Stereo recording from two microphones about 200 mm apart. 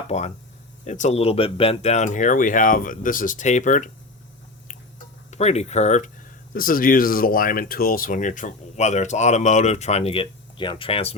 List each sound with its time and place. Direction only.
0.1 s speech: 35° left (ahead or behind)
5.3 s speech: 30° left (ahead or behind)
6.5 s speech: 45° left (ahead or behind); by 11.1 s 25° left (ahead or behind)